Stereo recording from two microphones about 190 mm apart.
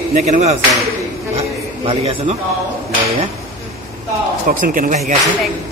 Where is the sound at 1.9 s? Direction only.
35° right (ahead or behind).